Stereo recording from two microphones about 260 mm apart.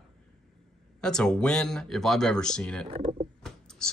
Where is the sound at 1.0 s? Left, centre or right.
Centre.